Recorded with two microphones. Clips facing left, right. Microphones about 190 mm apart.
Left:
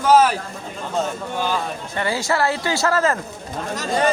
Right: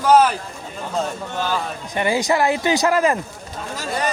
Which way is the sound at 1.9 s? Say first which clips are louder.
Right 3 dB; 15° right (ahead or behind).